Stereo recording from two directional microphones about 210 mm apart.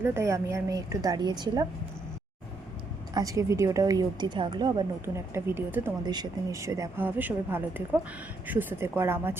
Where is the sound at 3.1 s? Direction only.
15° right (ahead or behind).